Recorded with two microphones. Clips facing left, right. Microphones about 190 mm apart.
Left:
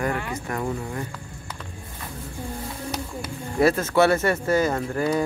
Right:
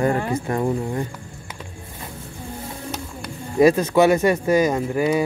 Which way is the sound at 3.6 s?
15° right (ahead or behind).